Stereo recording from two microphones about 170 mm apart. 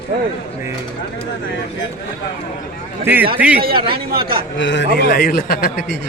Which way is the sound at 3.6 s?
60° right (ahead or behind).